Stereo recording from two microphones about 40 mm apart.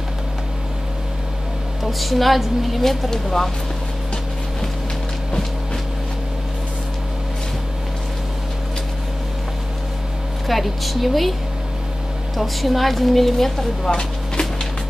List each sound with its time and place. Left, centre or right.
1.9 s a woman's voice: centre
10.4 s a woman's voice: centre
12.4 s a woman's voice: centre
13.8 s speech: left